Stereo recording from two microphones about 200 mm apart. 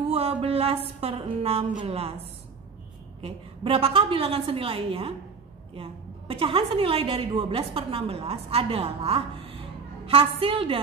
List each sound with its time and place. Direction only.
0.1 s a woman's voice: 30° right (ahead or behind)